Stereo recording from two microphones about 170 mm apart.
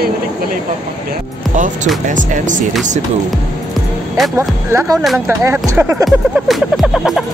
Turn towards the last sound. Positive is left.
turn(degrees=0)  # may be behind; listen again after turning